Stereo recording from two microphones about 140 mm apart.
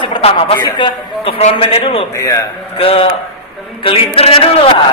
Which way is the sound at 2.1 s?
20° left (ahead or behind).